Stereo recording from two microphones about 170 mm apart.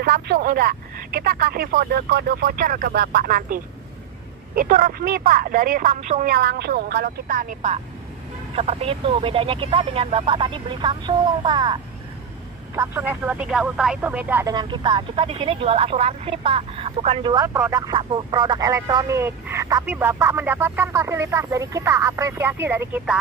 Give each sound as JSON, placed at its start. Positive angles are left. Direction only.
{"t": 0.0, "sound": "speech", "side_deg": -65}
{"t": 6.3, "sound": "speech", "side_deg": -70}
{"t": 8.5, "sound": "speech", "side_deg": -35}
{"t": 12.7, "sound": "speech", "side_deg": -15}
{"t": 14.5, "sound": "speech", "side_deg": -25}